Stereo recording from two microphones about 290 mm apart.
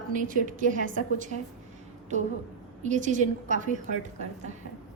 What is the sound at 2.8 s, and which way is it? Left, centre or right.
A woman's voice, right.